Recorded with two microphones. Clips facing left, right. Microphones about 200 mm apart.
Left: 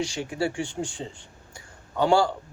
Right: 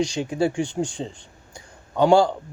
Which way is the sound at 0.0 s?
20° right (ahead or behind).